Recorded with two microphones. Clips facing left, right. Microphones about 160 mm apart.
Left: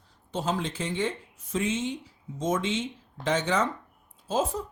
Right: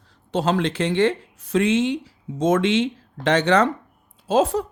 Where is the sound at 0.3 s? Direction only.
75° right (ahead or behind).